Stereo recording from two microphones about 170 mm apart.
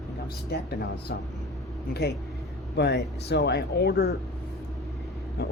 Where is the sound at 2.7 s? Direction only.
85° left; by 4.2 s 65° left (ahead or behind).